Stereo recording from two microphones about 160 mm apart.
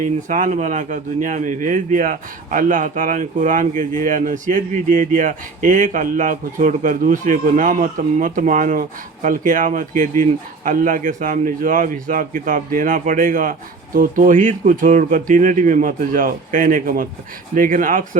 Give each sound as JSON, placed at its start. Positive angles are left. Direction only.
{"t": 0.0, "sound": "speech", "side_deg": -55}